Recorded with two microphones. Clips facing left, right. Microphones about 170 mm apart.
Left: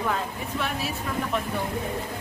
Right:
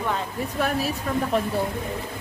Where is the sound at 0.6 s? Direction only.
40° right (ahead or behind).